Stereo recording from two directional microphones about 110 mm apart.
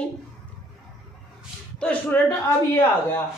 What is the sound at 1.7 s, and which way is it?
Speech, 10° left (ahead or behind).